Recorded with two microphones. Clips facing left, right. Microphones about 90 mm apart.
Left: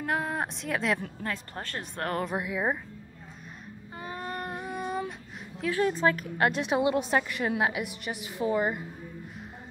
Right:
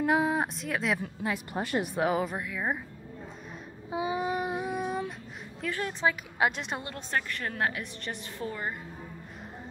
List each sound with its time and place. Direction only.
0.0 s a woman's voice: 5° right (ahead or behind)
2.3 s a woman's voice: 15° left (ahead or behind)
3.9 s child singing: 10° right (ahead or behind)
5.6 s a woman's voice: 5° left (ahead or behind)
6.0 s a woman's voice: 5° right (ahead or behind); by 8.8 s 15° left (ahead or behind)